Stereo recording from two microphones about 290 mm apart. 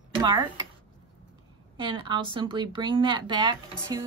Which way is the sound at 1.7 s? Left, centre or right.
Centre.